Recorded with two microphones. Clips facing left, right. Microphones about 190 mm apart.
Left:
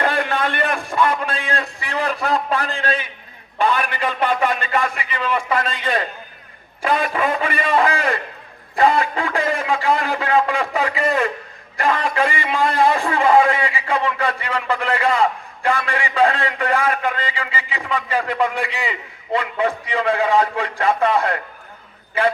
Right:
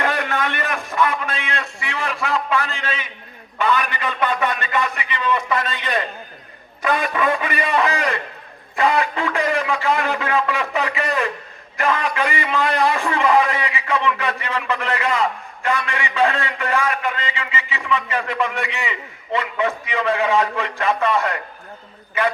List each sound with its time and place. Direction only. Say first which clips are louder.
0.0 s a man's voice: left 2 dB; 30° left (ahead or behind)